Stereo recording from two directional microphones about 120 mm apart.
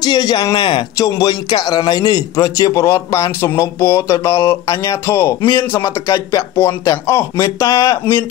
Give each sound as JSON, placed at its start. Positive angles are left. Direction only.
{"t": 0.0, "sound": "speech", "side_deg": 35}
{"t": 0.9, "sound": "a man's voice", "side_deg": 30}